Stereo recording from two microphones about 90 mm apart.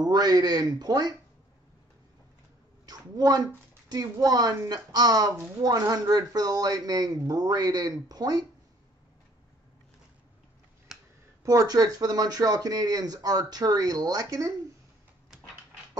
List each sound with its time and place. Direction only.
0.0 s speech: 50° right (ahead or behind)
2.9 s speech: 45° right (ahead or behind)
10.9 s a sound: 5° right (ahead or behind)
11.4 s speech: 45° right (ahead or behind)